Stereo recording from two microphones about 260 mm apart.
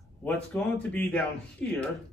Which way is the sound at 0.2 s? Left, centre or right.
Centre.